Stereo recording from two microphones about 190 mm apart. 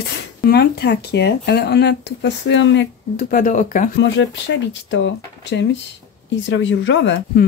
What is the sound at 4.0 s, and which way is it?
Speech, 70° left (ahead or behind).